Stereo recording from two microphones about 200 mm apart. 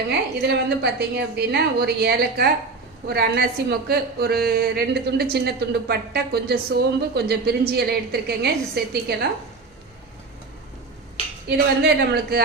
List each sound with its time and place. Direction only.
0.1 s a woman's voice: 55° right (ahead or behind)
11.4 s a woman's voice: 55° right (ahead or behind)